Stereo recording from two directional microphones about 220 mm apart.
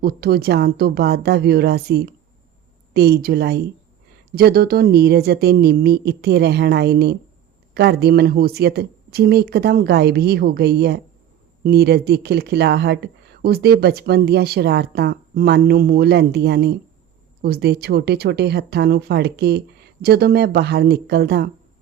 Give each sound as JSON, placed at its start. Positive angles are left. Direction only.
{"t": 0.0, "sound": "a woman's voice", "side_deg": -45}